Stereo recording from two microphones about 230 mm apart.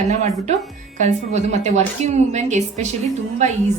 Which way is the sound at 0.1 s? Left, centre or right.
Right.